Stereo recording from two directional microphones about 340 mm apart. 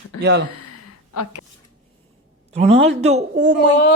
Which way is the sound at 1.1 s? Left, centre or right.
Left.